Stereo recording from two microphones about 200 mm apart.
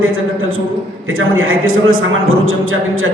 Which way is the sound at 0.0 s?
90° right.